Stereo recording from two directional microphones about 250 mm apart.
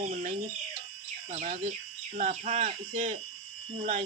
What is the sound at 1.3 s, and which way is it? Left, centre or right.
Speech, right.